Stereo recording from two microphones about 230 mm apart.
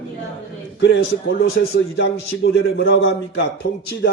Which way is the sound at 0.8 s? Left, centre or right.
Left.